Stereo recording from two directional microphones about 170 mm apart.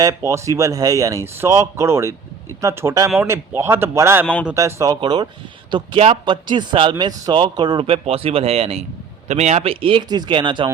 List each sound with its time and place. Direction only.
0.0 s speech: 20° right (ahead or behind)